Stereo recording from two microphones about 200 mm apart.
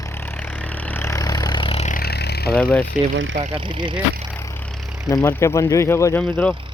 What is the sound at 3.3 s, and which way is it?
Speech, 30° right (ahead or behind).